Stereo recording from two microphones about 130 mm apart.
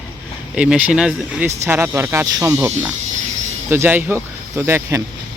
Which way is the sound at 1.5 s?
15° right (ahead or behind).